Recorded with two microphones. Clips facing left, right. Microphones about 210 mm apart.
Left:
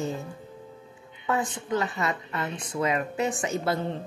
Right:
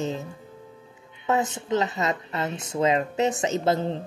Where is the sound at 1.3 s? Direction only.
20° right (ahead or behind).